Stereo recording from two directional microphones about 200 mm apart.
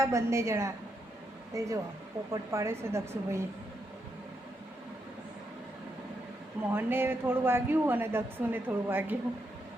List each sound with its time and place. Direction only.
0.0 s speech: 15° right (ahead or behind)
6.6 s speech: 10° right (ahead or behind)